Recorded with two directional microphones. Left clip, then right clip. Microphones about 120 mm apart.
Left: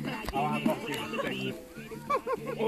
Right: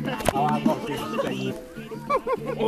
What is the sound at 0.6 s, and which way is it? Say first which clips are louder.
Music: right 6 dB; 10° right (ahead or behind).